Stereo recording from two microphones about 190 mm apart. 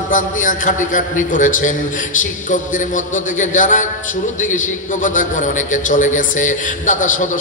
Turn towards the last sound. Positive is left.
turn(degrees=40)  # may be behind; listen again after turning